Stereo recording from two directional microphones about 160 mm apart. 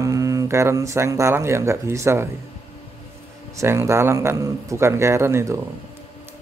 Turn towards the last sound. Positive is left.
turn(degrees=-15)  # may be behind; listen again after turning